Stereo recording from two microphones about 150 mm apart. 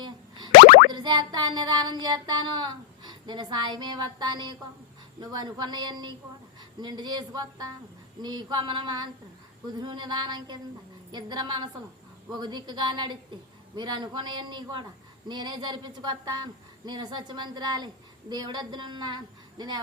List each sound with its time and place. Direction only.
0.0 s boing: 30° right (ahead or behind)
0.9 s speech: 30° right (ahead or behind)